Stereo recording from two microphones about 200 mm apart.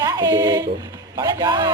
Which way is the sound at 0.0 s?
20° right (ahead or behind).